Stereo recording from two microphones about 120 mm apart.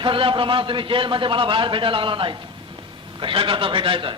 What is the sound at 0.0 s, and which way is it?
A man's voice, 45° right (ahead or behind).